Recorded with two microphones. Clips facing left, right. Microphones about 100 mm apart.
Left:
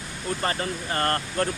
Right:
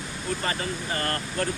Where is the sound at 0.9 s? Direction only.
45° left (ahead or behind).